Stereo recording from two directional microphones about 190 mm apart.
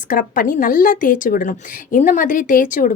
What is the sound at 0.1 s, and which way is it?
A woman's voice, 45° left (ahead or behind).